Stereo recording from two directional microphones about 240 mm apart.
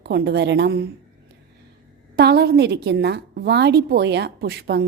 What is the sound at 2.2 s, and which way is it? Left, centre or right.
A woman's voice, right.